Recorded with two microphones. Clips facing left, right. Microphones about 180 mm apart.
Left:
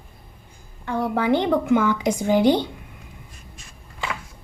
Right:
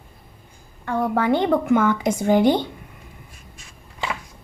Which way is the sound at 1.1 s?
50° right (ahead or behind).